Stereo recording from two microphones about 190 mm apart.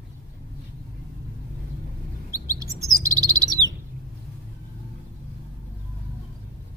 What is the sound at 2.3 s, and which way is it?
Chirp, 15° right (ahead or behind).